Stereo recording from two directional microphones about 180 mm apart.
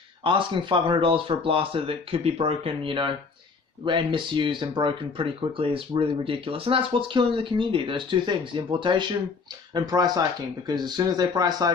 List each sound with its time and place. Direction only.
0.3 s speech: 30° right (ahead or behind)